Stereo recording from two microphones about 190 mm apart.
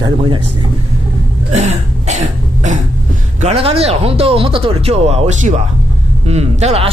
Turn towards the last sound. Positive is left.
turn(degrees=-35)  # may be behind; listen again after turning